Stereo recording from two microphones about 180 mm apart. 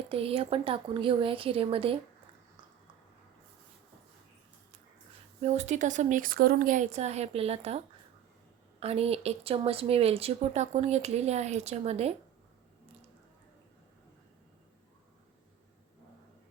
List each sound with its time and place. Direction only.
0.1 s speech: 30° right (ahead or behind)
5.4 s speech: 40° right (ahead or behind)
8.8 s speech: 35° right (ahead or behind)